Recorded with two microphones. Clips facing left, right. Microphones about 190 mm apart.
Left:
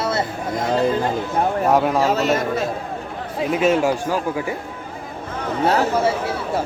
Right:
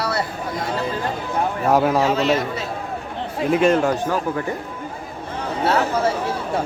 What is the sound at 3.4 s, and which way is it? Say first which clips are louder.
A man's voice: right 1 dB; centre (ahead or behind).